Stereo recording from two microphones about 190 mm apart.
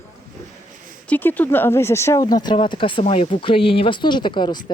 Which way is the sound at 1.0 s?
10° left (ahead or behind).